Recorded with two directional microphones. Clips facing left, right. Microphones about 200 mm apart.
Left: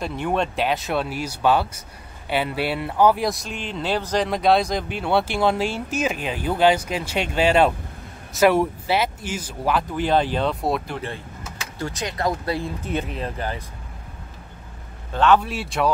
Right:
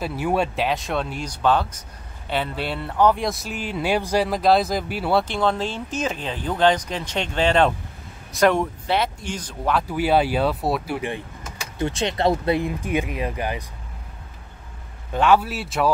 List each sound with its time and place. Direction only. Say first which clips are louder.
0.0 s speech: right 1 dB; 5° right (ahead or behind)
5.2 s speech: left 2 dB; 10° left (ahead or behind)
9.8 s speech: right 1 dB; 10° right (ahead or behind)
11.0 s speech: right 3 dB; 15° right (ahead or behind)
11.8 s speech: right 4 dB; 25° right (ahead or behind)
15.1 s speech: even; 10° right (ahead or behind)